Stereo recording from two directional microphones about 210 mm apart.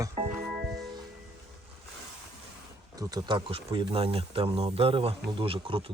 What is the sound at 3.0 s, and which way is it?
Speech, 20° right (ahead or behind).